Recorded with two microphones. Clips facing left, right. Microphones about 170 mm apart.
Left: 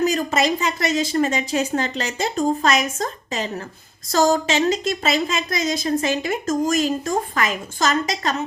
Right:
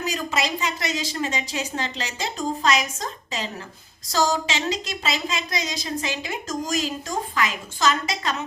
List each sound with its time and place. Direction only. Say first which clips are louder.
0.0 s a woman's voice: left 7 dB; 45° left (ahead or behind)